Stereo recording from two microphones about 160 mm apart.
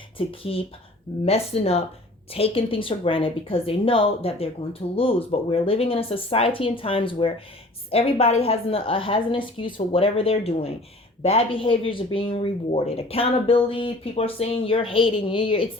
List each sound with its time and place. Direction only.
0.2 s a woman's voice: 35° left (ahead or behind)